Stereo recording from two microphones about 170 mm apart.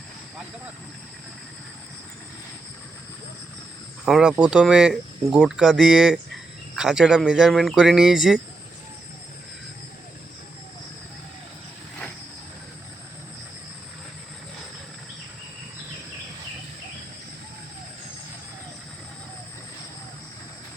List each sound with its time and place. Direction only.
4.0 s speech: 5° right (ahead or behind)